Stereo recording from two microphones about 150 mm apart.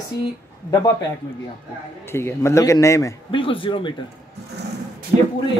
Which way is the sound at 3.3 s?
35° left (ahead or behind).